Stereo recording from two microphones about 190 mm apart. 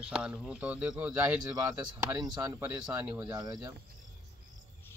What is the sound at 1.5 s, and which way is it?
Speech, 20° right (ahead or behind).